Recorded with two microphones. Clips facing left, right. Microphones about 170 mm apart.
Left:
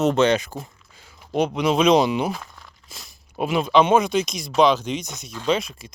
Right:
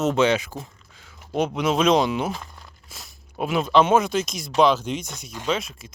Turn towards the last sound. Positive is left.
turn(degrees=0)  # may be behind; listen again after turning